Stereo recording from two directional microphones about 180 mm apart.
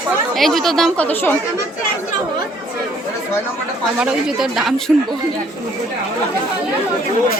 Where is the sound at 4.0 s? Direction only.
5° right (ahead or behind).